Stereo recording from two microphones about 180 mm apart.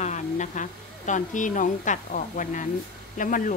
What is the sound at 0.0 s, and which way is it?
A woman's voice, 40° left (ahead or behind).